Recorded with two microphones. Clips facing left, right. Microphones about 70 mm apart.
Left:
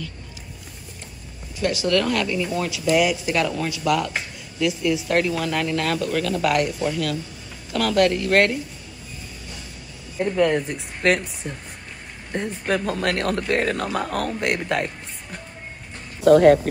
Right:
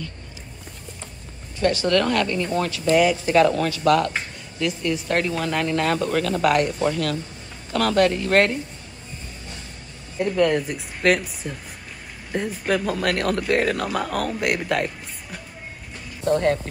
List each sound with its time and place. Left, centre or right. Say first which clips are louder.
1.6 s speech: right 3 dB; centre
1.9 s speech: left 1 dB; centre
10.1 s speech: even; centre
16.3 s speech: left 8 dB; left